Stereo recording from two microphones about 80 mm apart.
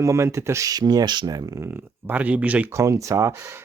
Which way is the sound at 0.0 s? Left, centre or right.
Right.